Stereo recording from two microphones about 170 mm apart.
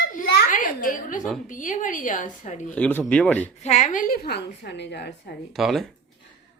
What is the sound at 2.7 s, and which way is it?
Speech, 5° left (ahead or behind).